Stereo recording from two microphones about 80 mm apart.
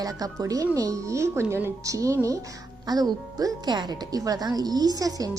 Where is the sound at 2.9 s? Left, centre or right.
Right.